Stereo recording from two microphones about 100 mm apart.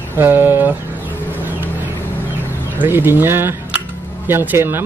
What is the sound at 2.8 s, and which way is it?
Speech, 20° right (ahead or behind).